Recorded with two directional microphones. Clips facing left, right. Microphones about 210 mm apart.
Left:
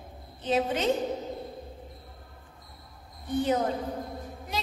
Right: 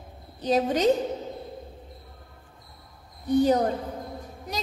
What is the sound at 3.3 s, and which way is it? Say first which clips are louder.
Speech: right 6 dB; 40° right (ahead or behind).